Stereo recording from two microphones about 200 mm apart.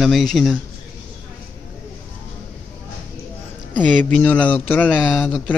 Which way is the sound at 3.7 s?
5° left (ahead or behind).